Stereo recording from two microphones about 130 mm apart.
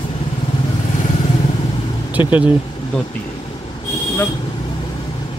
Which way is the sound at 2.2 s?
40° left (ahead or behind).